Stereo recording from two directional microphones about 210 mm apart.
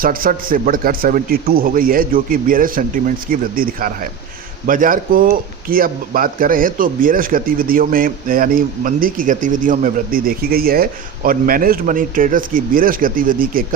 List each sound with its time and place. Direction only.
0.0 s a man's voice: 40° right (ahead or behind)